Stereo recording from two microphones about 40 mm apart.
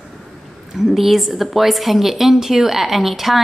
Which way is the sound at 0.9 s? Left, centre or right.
Centre.